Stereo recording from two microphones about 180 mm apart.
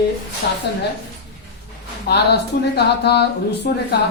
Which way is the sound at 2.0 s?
65° left (ahead or behind).